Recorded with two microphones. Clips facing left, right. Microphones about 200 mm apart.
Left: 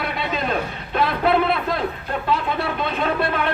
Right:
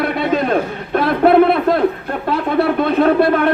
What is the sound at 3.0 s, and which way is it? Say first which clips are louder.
Speech: right 8 dB; 55° right (ahead or behind).